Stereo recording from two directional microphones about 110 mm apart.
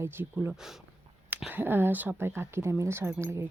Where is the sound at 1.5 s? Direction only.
20° right (ahead or behind).